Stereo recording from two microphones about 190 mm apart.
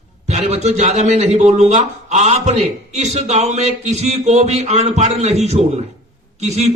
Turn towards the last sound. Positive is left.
turn(degrees=-35)  # may be behind; listen again after turning